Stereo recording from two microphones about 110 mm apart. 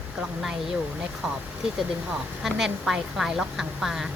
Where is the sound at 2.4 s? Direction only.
5° right (ahead or behind).